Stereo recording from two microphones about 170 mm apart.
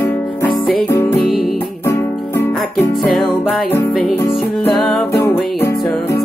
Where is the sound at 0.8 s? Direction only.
15° left (ahead or behind).